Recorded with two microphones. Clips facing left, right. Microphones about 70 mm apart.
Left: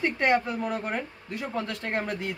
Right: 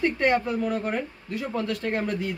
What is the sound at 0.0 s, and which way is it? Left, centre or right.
Speech, left.